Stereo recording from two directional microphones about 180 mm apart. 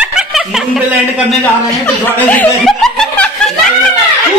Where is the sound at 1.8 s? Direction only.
10° left (ahead or behind).